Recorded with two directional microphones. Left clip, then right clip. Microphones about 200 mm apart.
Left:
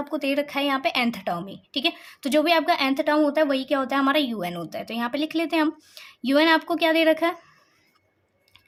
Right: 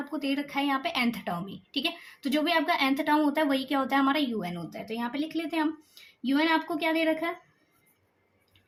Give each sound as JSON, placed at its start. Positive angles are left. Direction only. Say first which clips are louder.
{"t": 0.1, "sound": "a woman's voice", "louder": "left 7 dB", "side_deg": 35}